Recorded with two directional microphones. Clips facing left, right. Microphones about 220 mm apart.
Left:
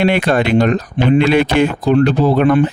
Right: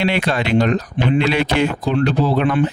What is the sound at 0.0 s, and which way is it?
Speech, 50° left (ahead or behind).